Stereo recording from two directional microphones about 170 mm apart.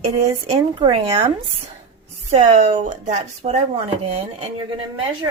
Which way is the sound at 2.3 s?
40° right (ahead or behind).